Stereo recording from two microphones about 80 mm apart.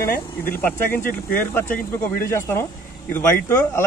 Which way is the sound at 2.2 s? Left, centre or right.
Left.